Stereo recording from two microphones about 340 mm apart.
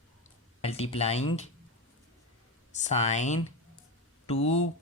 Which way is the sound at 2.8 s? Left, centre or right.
Centre.